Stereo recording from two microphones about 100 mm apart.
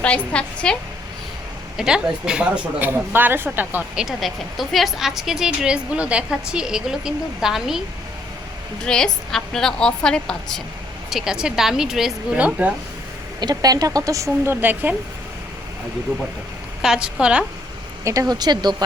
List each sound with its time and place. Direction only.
0.0 s a woman's voice: 10° left (ahead or behind)
1.7 s a woman's voice: 5° right (ahead or behind)
4.0 s a woman's voice: centre (ahead or behind)
8.8 s a woman's voice: 5° left (ahead or behind)
11.1 s a woman's voice: 5° right (ahead or behind)
13.4 s speech: 40° right (ahead or behind); by 14.9 s 20° right (ahead or behind)
16.8 s a woman's voice: 5° right (ahead or behind)
18.0 s speech: 35° right (ahead or behind)